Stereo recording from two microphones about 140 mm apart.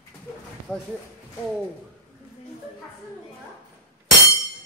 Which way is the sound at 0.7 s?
10° left (ahead or behind).